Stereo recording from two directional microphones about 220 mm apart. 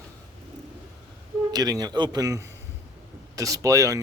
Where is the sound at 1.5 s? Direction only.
15° right (ahead or behind).